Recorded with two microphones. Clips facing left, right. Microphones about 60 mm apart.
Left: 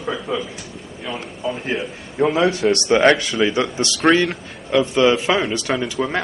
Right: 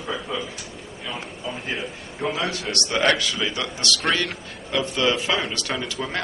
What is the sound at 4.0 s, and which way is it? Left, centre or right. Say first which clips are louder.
Speech: left 10 dB; centre.